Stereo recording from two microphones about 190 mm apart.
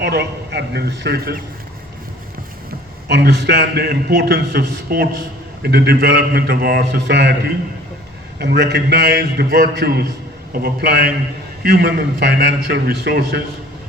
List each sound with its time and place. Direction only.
0.0 s a man's voice: 60° right (ahead or behind)
3.1 s a man's voice: 65° right (ahead or behind)